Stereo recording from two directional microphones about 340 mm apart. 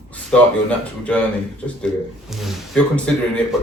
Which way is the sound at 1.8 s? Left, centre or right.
Centre.